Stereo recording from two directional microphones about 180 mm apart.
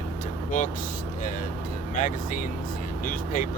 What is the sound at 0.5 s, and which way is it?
Speech, 45° left (ahead or behind).